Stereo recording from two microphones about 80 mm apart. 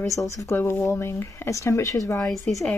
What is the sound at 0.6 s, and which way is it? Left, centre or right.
Speech, left.